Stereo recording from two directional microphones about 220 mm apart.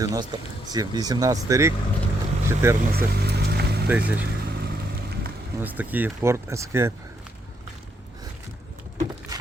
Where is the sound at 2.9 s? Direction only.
45° right (ahead or behind).